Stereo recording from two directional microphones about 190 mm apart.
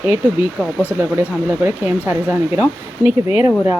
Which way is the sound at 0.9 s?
10° right (ahead or behind).